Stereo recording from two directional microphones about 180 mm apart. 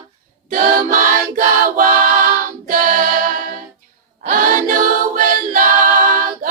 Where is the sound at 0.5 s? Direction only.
50° right (ahead or behind).